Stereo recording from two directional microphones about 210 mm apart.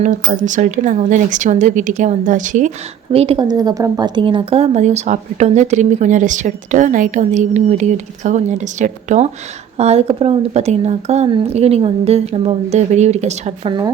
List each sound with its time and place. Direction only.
0.0 s a woman's voice: 40° right (ahead or behind)